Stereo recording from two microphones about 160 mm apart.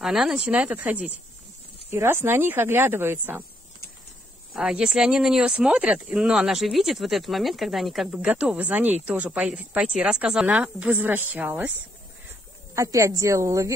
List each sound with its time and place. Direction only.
0.0 s a woman's voice: 5° right (ahead or behind)
4.6 s a woman's voice: 5° right (ahead or behind)
12.7 s a woman's voice: 20° right (ahead or behind)